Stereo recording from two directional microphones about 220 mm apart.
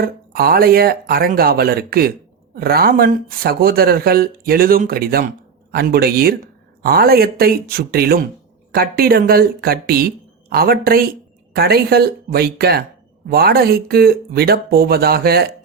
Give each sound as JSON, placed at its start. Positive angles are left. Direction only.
{"t": 0.0, "sound": "speech", "side_deg": -45}